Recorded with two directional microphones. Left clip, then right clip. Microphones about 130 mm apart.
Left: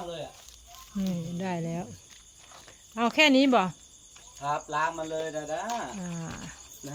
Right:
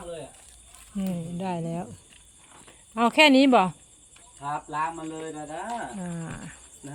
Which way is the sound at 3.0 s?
45° right (ahead or behind).